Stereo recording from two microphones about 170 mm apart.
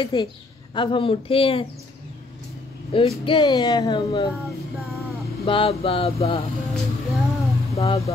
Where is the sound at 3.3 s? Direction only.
30° left (ahead or behind).